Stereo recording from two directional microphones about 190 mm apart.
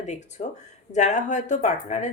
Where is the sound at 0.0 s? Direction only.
40° left (ahead or behind).